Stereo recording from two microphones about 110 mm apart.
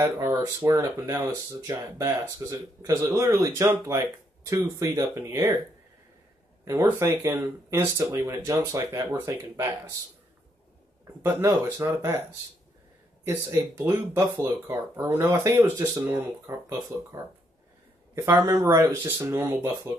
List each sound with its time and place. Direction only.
0.0 s speech: 25° right (ahead or behind)
6.6 s speech: 25° right (ahead or behind)
11.4 s speech: 30° right (ahead or behind)
15.2 s speech: 30° right (ahead or behind)
18.5 s speech: 30° right (ahead or behind)